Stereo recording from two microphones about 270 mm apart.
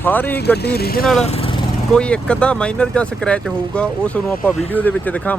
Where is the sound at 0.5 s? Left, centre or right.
Left.